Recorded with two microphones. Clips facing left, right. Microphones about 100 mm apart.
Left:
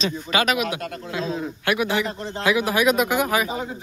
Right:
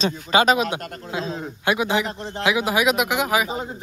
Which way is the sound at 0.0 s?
30° right (ahead or behind).